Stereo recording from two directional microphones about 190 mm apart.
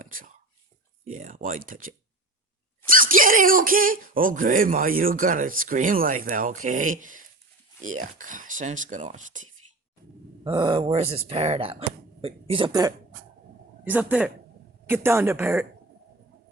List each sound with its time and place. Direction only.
0.0 s whispering: 45° right (ahead or behind)
1.0 s speech: 40° right (ahead or behind)
10.4 s speech: 25° right (ahead or behind)
13.8 s a woman's voice: 10° right (ahead or behind)